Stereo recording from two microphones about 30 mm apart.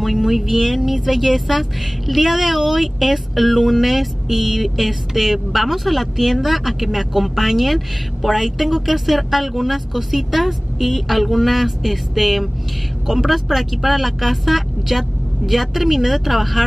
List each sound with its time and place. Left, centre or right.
0.0 s speech: centre